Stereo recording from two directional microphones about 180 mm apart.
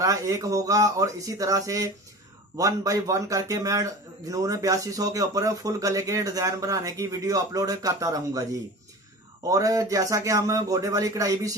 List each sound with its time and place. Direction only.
0.0 s speech: 20° right (ahead or behind)